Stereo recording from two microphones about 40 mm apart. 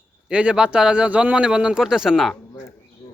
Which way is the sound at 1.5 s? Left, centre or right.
Right.